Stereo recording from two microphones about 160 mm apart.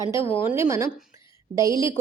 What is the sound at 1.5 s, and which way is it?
Speech, 20° right (ahead or behind).